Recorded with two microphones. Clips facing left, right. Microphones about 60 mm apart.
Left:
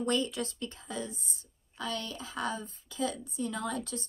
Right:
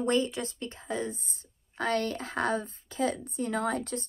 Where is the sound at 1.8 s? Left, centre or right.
Right.